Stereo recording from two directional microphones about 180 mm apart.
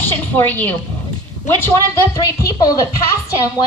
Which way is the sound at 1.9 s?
20° left (ahead or behind).